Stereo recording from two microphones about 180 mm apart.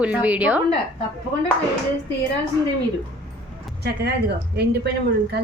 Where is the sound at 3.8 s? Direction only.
60° right (ahead or behind).